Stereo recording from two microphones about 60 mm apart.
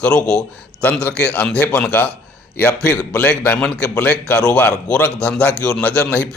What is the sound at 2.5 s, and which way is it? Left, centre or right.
A man's voice, left.